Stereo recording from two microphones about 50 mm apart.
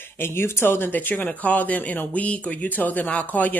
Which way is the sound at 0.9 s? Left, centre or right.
Left.